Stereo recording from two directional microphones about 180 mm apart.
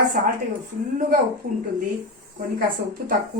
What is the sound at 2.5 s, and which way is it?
Speech, 55° right (ahead or behind).